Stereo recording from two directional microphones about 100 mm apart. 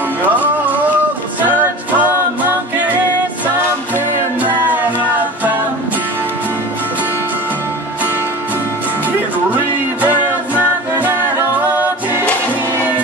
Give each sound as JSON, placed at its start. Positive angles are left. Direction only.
{"t": 0.3, "sound": "music", "side_deg": -15}
{"t": 4.4, "sound": "music", "side_deg": -15}
{"t": 10.0, "sound": "music", "side_deg": -20}